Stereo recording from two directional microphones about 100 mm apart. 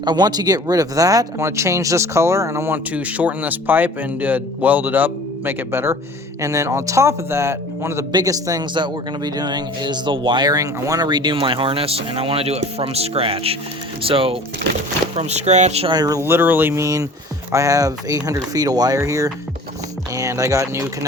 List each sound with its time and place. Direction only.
0.0 s speech: 45° right (ahead or behind); by 14.3 s 65° right (ahead or behind)
15.1 s speech: 85° right
15.9 s speech: 40° right (ahead or behind)
16.2 s speech: 20° right (ahead or behind)
16.8 s speech: 35° right (ahead or behind)